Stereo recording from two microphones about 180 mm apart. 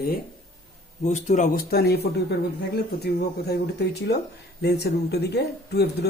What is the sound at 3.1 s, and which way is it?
Speech, 60° left (ahead or behind).